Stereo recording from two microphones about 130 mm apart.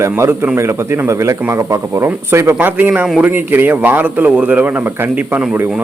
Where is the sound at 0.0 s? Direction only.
20° right (ahead or behind).